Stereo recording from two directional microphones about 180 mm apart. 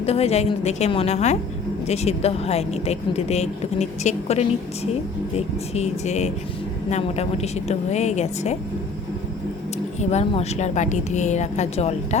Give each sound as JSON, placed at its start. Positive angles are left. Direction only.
{"t": 0.0, "sound": "speech", "side_deg": 35}
{"t": 5.7, "sound": "speech", "side_deg": 40}
{"t": 10.0, "sound": "speech", "side_deg": 40}